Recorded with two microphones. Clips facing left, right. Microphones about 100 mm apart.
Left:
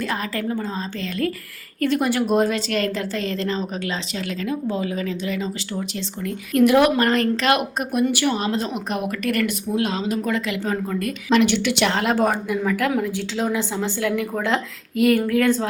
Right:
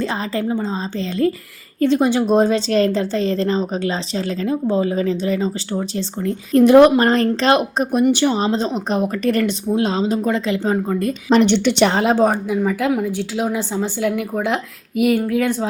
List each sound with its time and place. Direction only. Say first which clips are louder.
0.0 s a woman's voice: right 4 dB; 25° right (ahead or behind)
12.1 s a woman's voice: right 4 dB; 20° right (ahead or behind)